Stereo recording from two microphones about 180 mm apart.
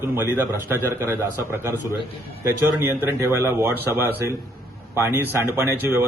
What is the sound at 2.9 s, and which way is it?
A man's voice, 15° right (ahead or behind).